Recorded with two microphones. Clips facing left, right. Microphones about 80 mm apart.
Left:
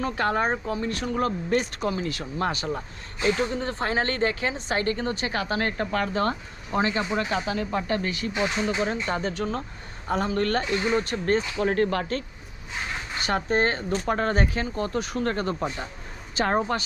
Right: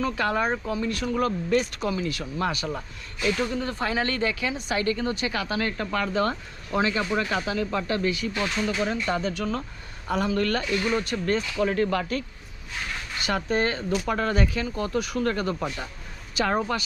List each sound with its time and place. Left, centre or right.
0.0 s speech: left
12.7 s speech: left